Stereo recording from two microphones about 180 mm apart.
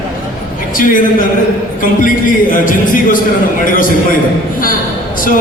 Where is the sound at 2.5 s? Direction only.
50° left (ahead or behind).